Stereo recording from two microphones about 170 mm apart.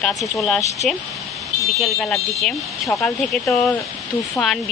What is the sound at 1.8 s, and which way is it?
Speech, centre (ahead or behind).